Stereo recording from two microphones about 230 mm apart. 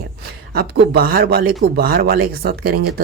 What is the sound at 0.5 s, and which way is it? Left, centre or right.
Speech, right.